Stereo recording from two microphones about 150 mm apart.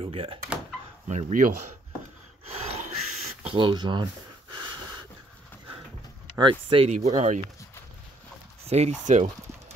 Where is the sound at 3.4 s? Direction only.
35° right (ahead or behind).